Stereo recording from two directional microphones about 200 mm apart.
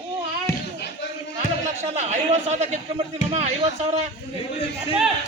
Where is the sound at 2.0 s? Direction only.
35° right (ahead or behind).